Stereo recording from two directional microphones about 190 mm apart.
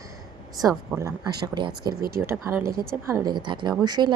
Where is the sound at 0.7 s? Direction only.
20° right (ahead or behind).